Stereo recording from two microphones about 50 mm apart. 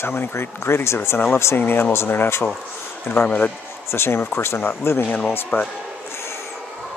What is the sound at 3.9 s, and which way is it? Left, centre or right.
Speech, left.